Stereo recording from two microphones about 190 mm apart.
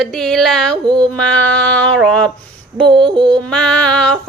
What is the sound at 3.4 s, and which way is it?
Music, 5° left (ahead or behind).